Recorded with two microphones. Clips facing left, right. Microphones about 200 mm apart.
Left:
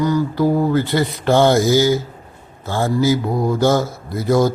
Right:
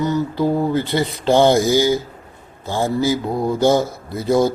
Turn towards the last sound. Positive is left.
turn(degrees=-20)  # may be behind; listen again after turning